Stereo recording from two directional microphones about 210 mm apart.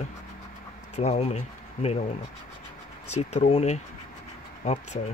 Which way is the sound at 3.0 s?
30° left (ahead or behind).